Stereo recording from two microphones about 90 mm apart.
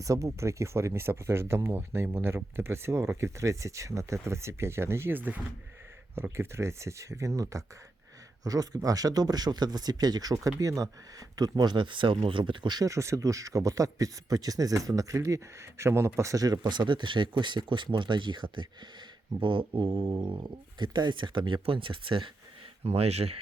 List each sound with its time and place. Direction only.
0.0 s speech: 35° right (ahead or behind); by 12.8 s 60° right (ahead or behind)
12.8 s speech: 35° right (ahead or behind); by 22.3 s 70° right (ahead or behind)
22.8 s speech: 90° right